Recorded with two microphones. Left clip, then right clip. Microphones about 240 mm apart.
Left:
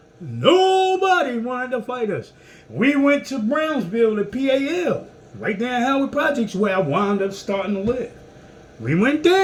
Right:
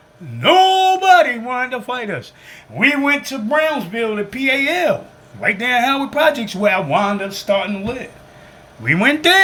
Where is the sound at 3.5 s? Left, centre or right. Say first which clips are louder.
Right 5 dB; centre.